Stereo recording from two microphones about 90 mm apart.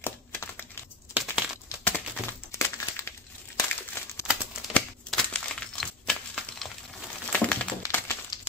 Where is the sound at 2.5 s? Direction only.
30° left (ahead or behind).